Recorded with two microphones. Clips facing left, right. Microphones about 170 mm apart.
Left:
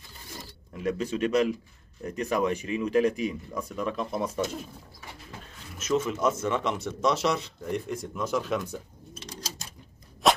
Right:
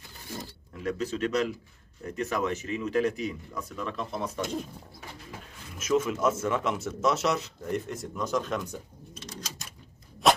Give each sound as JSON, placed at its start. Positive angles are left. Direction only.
{"t": 0.8, "sound": "speech", "side_deg": 10}
{"t": 5.8, "sound": "speech", "side_deg": -10}
{"t": 10.2, "sound": "a sound", "side_deg": 0}